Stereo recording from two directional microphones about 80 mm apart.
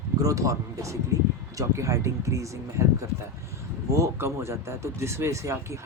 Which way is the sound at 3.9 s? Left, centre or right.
Right.